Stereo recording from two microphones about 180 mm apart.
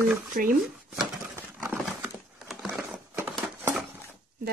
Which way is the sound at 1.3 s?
5° right (ahead or behind).